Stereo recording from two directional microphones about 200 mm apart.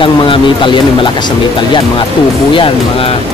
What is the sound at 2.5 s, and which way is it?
Speech, 25° left (ahead or behind).